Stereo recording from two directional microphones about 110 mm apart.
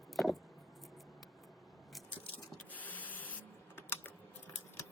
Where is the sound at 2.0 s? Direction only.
15° left (ahead or behind).